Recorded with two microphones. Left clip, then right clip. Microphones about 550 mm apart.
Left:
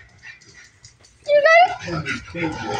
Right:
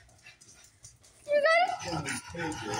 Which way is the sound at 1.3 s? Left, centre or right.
Right.